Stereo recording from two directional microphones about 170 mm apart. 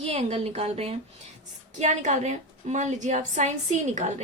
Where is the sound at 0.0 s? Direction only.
40° right (ahead or behind).